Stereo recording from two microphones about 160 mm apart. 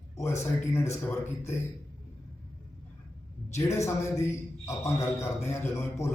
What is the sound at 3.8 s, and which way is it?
A man's voice, 15° left (ahead or behind).